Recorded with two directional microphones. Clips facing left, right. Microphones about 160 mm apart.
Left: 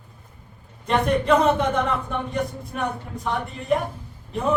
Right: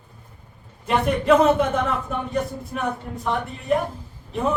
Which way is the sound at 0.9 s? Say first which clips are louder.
Right 1 dB; 5° right (ahead or behind).